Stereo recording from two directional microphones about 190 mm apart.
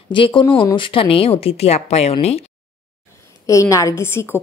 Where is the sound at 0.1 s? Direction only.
25° left (ahead or behind).